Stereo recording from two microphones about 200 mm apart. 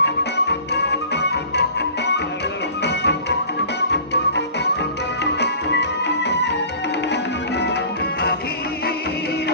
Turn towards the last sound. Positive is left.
turn(degrees=55)  # may be behind; listen again after turning